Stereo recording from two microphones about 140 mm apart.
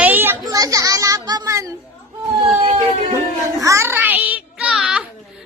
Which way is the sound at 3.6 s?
20° right (ahead or behind).